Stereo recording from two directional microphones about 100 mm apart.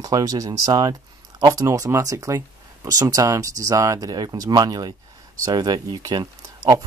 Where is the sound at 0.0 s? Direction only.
40° right (ahead or behind).